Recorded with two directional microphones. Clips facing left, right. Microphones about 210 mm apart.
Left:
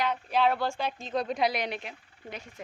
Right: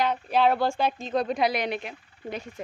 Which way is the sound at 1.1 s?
60° right (ahead or behind).